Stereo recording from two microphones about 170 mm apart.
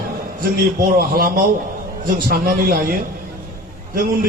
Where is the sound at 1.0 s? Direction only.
60° right (ahead or behind).